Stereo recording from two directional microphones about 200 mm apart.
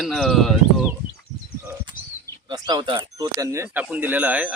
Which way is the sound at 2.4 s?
20° right (ahead or behind).